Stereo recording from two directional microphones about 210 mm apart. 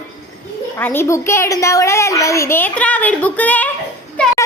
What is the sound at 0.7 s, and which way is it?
A woman's voice, 10° left (ahead or behind).